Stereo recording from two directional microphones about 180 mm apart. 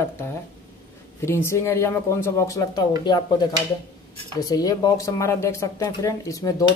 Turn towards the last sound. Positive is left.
turn(degrees=20)  # may be behind; listen again after turning